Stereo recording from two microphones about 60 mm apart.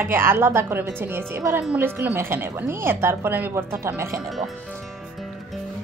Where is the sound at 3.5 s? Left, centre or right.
Right.